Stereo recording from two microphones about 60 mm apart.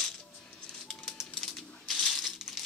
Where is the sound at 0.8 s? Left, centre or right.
Centre.